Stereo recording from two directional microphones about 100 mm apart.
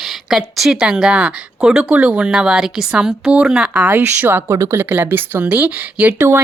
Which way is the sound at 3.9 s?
20° right (ahead or behind).